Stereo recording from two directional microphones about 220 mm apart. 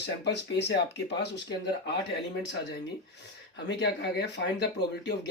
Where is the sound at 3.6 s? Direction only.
50° left (ahead or behind).